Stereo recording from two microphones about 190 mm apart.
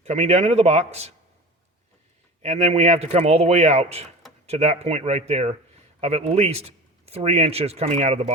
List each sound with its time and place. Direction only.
0.0 s a man's voice: 35° right (ahead or behind)
2.4 s a man's voice: 35° right (ahead or behind)